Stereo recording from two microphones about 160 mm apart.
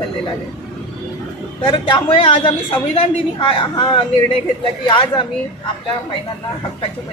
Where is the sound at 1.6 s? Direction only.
30° left (ahead or behind).